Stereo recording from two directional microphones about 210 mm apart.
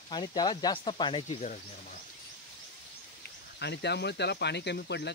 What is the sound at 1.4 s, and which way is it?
Speech, 35° left (ahead or behind).